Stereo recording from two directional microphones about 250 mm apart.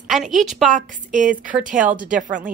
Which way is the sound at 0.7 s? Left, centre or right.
Right.